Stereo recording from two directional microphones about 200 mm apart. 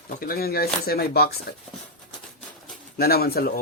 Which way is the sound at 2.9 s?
50° left (ahead or behind).